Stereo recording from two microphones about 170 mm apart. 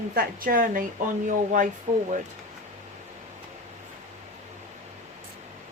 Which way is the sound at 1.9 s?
45° right (ahead or behind).